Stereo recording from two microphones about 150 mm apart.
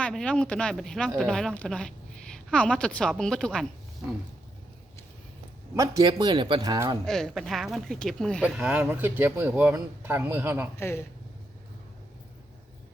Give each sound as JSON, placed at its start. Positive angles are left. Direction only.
{"t": 0.0, "sound": "a woman's voice", "side_deg": 5}
{"t": 5.7, "sound": "a man's voice", "side_deg": -25}
{"t": 7.0, "sound": "speech", "side_deg": 5}
{"t": 8.4, "sound": "speech", "side_deg": -10}
{"t": 10.8, "sound": "speech", "side_deg": 15}